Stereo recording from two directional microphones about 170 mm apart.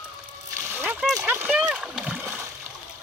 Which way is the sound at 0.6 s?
10° right (ahead or behind).